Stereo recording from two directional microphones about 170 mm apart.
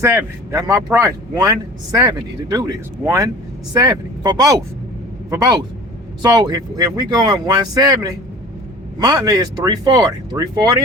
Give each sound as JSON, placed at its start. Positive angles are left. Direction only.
{"t": 0.0, "sound": "speech", "side_deg": -15}